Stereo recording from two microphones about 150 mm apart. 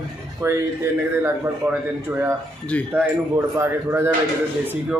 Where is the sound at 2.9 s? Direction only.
15° right (ahead or behind).